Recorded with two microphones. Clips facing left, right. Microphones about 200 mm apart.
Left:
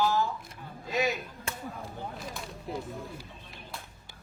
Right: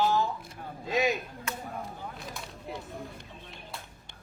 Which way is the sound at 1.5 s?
30° left (ahead or behind).